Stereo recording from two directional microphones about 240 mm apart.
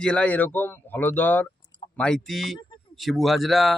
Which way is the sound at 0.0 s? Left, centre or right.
Centre.